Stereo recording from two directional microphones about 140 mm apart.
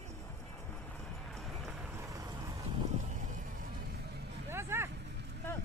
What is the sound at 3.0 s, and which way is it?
Music, 60° right (ahead or behind).